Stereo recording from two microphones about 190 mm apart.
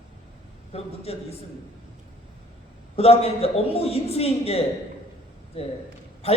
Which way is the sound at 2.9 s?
30° left (ahead or behind).